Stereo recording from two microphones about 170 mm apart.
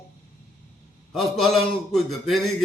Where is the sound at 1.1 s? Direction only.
Centre (ahead or behind).